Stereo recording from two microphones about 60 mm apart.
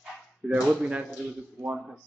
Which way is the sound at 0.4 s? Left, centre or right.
Centre.